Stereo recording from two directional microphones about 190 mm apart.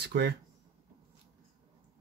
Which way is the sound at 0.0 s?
60° right (ahead or behind).